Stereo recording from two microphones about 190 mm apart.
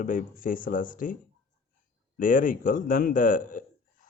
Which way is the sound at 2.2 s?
45° left (ahead or behind).